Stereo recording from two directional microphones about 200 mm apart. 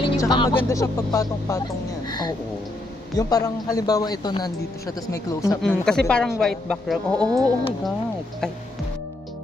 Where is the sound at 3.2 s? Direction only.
20° left (ahead or behind).